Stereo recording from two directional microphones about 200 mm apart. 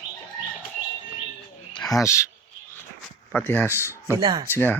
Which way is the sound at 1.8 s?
15° left (ahead or behind).